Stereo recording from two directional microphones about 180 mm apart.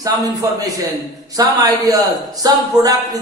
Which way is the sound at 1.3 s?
20° right (ahead or behind).